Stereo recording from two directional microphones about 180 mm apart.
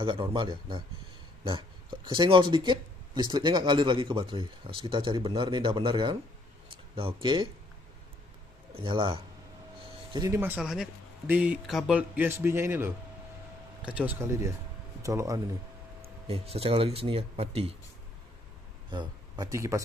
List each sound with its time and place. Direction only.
0.0 s speech: 25° right (ahead or behind)
8.7 s speech: 25° right (ahead or behind)
10.4 s speech: 5° right (ahead or behind)
16.0 s speech: 35° right (ahead or behind)
18.9 s speech: 25° right (ahead or behind)